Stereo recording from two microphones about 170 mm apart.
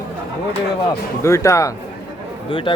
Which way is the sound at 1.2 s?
15° left (ahead or behind).